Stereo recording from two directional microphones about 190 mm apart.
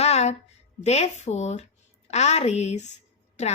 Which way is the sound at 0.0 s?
35° left (ahead or behind).